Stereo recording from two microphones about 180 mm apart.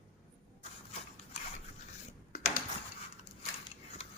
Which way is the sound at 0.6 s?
35° left (ahead or behind).